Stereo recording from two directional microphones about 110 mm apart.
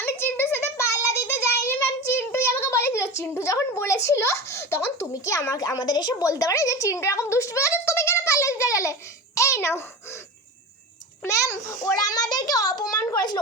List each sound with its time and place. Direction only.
0.0 s child singing: 20° left (ahead or behind)
2.1 s a sound: 20° left (ahead or behind)
5.1 s a woman's voice: 30° left (ahead or behind)
11.2 s a child's voice: 30° left (ahead or behind)
12.2 s a child's voice: 35° left (ahead or behind)